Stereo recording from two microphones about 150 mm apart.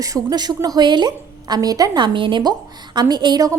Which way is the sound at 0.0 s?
25° right (ahead or behind).